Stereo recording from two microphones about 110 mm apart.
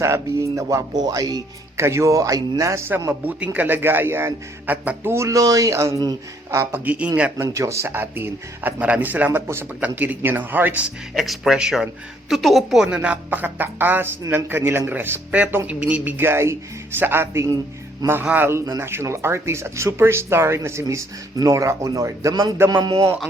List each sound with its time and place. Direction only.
0.0 s a man's voice: 25° right (ahead or behind)
6.7 s a woman's voice: 15° right (ahead or behind)
7.3 s a woman's voice: 25° right (ahead or behind)
11.1 s a woman's voice: centre (ahead or behind); by 18.6 s 20° right (ahead or behind)
18.6 s a man's voice: 30° right (ahead or behind)